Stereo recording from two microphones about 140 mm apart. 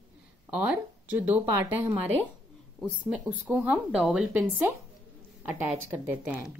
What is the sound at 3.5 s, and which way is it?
Speech, 10° right (ahead or behind).